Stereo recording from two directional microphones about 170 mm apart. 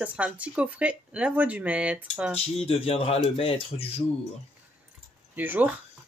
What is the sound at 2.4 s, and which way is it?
Speech, 35° left (ahead or behind).